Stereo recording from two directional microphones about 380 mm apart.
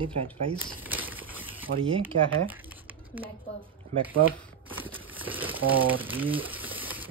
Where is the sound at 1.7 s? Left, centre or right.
Centre.